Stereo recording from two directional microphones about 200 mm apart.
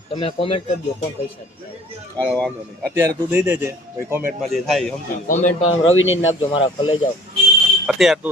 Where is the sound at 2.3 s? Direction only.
Centre (ahead or behind).